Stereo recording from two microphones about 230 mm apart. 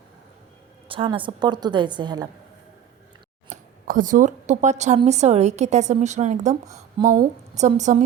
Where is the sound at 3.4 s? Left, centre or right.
Right.